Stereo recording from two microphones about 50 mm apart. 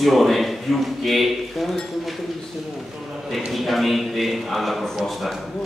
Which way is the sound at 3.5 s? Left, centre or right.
Centre.